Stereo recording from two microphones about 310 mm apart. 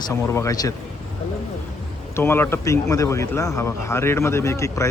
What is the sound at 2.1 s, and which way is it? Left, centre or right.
Speech, centre.